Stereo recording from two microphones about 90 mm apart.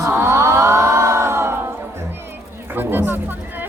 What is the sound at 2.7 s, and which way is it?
Speech, 25° right (ahead or behind).